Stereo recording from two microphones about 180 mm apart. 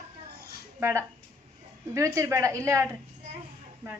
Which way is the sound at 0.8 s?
15° right (ahead or behind).